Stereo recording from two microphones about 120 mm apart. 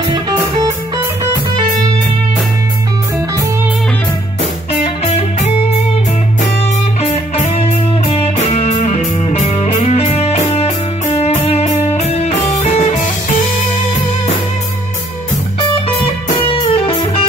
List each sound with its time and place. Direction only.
1.2 s music: 30° right (ahead or behind)
4.8 s music: 60° left (ahead or behind)
7.0 s music: 60° left (ahead or behind)
16.4 s music: 50° left (ahead or behind)